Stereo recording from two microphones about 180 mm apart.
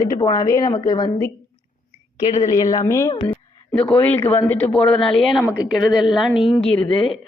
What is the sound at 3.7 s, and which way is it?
A woman's voice, 5° left (ahead or behind).